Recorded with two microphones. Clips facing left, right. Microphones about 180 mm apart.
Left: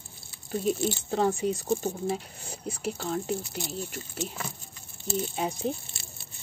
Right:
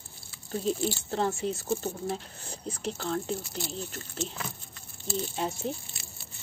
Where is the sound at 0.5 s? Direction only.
15° left (ahead or behind).